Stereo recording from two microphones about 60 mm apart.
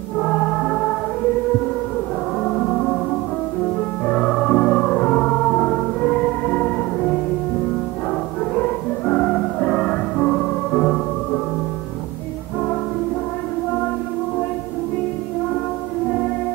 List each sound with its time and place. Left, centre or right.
0.2 s music: centre
2.4 s music: centre
9.0 s music: centre